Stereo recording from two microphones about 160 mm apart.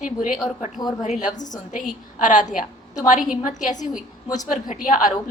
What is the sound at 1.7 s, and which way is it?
A woman's voice, 55° left (ahead or behind).